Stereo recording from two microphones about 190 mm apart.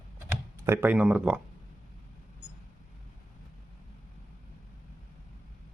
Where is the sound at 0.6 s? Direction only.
10° right (ahead or behind).